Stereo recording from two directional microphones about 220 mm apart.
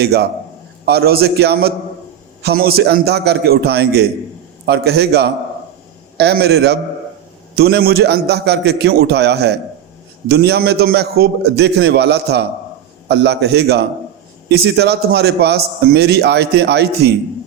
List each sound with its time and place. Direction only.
0.0 s a man's voice: 45° right (ahead or behind)